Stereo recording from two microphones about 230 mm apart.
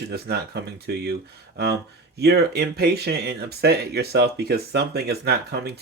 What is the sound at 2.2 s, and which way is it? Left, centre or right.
Speech, right.